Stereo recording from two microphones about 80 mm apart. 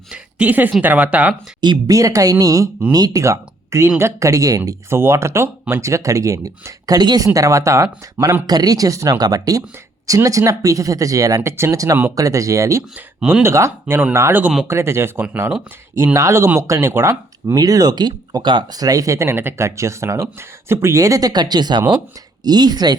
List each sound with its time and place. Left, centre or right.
0.1 s a sound: centre
0.8 s speech: centre
1.9 s speech: right
4.2 s speech: right
4.9 s speech: right
7.3 s speech: right
8.4 s speech: right
11.4 s speech: right
17.5 s speech: right